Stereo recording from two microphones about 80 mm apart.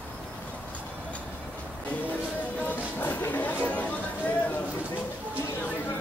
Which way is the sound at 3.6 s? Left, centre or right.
Centre.